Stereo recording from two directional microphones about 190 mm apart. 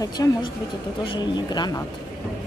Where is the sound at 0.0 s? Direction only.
20° left (ahead or behind).